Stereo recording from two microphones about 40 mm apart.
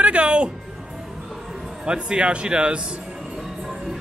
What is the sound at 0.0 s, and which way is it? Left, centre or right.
Music, right.